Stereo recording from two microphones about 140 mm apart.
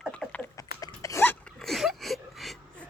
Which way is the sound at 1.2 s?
15° left (ahead or behind).